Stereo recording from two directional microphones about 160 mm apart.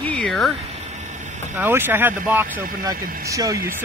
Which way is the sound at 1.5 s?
10° right (ahead or behind).